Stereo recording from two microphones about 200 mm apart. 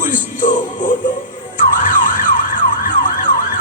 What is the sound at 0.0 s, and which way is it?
Music, 40° left (ahead or behind).